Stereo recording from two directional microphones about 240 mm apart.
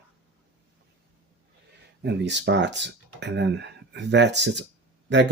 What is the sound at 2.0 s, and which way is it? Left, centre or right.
Speech, right.